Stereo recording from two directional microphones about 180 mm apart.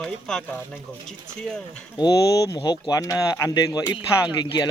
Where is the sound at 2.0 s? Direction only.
20° left (ahead or behind).